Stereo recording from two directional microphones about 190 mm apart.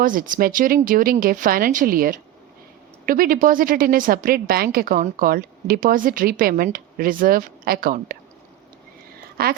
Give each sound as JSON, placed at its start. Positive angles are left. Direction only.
{"t": 0.0, "sound": "a woman's voice", "side_deg": -45}
{"t": 9.4, "sound": "a woman's voice", "side_deg": -50}